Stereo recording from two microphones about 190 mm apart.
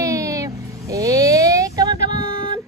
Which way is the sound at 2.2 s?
40° left (ahead or behind).